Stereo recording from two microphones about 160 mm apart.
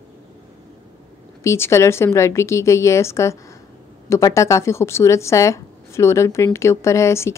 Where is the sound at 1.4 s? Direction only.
15° left (ahead or behind).